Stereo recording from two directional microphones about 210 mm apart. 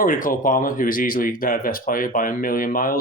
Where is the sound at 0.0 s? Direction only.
40° left (ahead or behind).